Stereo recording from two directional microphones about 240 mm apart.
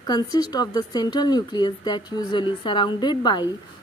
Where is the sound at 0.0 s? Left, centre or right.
Centre.